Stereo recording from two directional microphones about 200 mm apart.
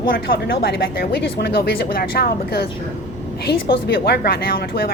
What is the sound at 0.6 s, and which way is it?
Speech, 50° left (ahead or behind).